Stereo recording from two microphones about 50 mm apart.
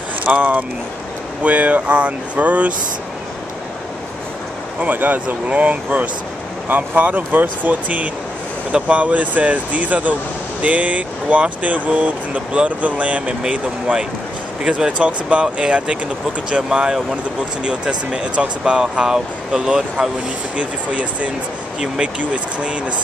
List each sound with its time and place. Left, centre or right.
0.3 s speech: right
4.7 s speech: right; by 20.1 s centre
20.5 s speech: right